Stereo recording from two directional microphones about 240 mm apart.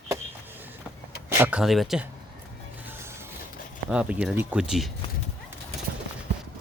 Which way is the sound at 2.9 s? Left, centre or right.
Centre.